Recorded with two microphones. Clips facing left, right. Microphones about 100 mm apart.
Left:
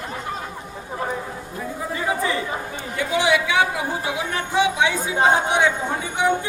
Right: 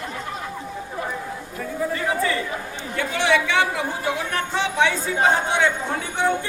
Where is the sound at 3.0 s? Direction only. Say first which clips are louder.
Left 1 dB; 15° left (ahead or behind).